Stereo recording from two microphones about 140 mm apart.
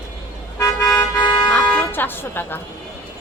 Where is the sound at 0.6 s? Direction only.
25° left (ahead or behind).